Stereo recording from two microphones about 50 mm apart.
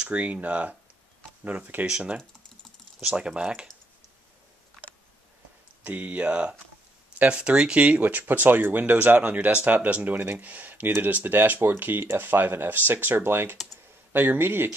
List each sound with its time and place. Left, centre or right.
0.0 s speech: right
1.9 s speech: centre
5.9 s speech: right
8.0 s speech: right